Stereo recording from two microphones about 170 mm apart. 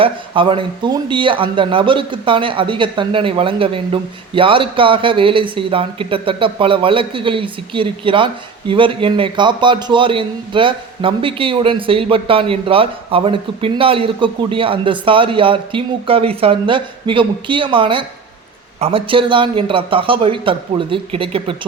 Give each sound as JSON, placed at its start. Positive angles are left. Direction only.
{"t": 0.0, "sound": "speech", "side_deg": -30}